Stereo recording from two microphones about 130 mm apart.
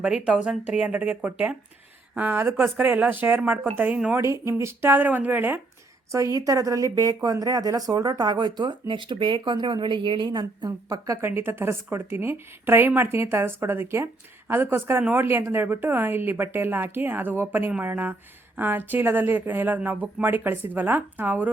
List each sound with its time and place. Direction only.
0.0 s speech: 5° right (ahead or behind)
4.2 s speech: 25° right (ahead or behind)